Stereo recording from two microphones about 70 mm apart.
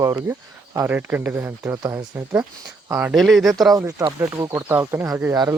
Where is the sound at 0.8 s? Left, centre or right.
Right.